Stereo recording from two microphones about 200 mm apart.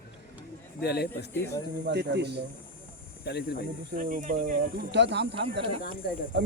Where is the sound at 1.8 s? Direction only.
60° right (ahead or behind).